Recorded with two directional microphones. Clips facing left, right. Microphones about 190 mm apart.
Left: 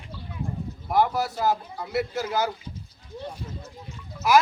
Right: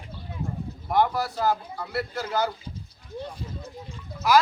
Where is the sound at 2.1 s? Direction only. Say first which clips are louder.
Left 1 dB; 15° left (ahead or behind).